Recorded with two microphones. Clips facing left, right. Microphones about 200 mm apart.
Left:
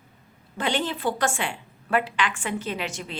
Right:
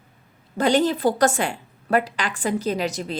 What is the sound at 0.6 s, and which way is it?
A woman's voice, 40° right (ahead or behind).